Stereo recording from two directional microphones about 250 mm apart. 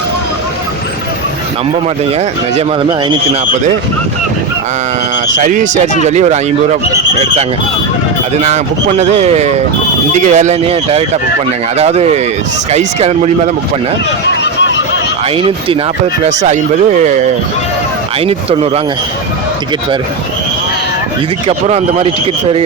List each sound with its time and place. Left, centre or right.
3.5 s speech: right
5.4 s speech: right
8.4 s speech: right
14.4 s a sound: left
15.4 s speech: right
18.3 s speech: right
21.4 s speech: right